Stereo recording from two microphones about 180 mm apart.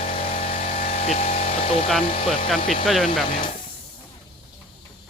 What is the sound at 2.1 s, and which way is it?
Speech, 30° left (ahead or behind).